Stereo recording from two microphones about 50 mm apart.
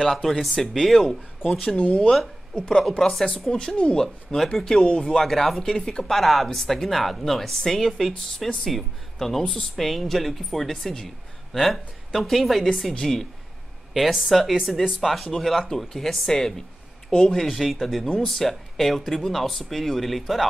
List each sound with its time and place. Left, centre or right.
0.0 s speech: centre
3.0 s speech: centre
3.5 s speech: centre
4.4 s speech: centre
4.6 s speech: centre
5.2 s speech: centre
6.1 s speech: centre